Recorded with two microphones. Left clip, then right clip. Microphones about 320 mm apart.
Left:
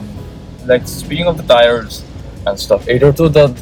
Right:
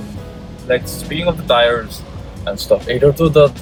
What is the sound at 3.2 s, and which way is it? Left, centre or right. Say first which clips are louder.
Speech: right 1 dB; left.